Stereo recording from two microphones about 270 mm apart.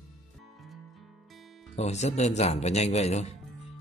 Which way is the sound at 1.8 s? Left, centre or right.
Left.